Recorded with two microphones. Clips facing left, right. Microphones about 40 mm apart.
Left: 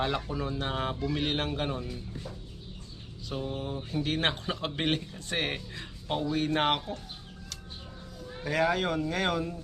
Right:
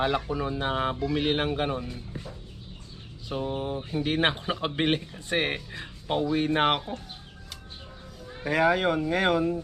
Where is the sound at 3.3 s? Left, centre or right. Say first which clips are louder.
Right 4 dB; centre.